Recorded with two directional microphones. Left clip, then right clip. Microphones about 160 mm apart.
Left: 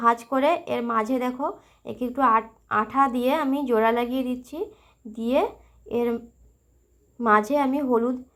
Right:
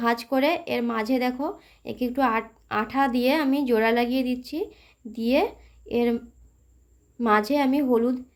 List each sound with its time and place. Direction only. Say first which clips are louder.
0.0 s speech: left 4 dB; 35° right (ahead or behind)
0.3 s a woman's voice: left 1 dB; 20° right (ahead or behind)
7.2 s a woman's voice: left 2 dB; 20° right (ahead or behind)